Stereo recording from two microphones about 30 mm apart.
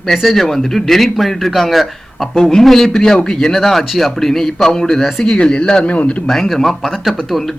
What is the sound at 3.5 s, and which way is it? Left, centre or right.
A man's voice, centre.